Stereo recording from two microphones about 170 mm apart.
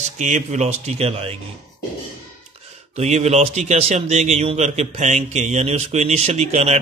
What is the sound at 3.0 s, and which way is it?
A man's voice, 40° right (ahead or behind).